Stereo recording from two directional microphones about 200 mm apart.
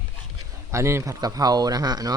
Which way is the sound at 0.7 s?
15° right (ahead or behind).